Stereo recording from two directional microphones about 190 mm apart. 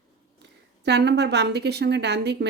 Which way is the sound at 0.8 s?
60° right (ahead or behind).